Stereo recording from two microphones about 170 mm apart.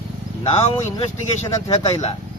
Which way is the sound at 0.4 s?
35° left (ahead or behind).